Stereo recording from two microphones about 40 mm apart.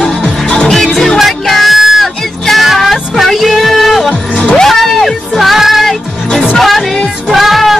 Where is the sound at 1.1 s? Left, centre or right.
Centre.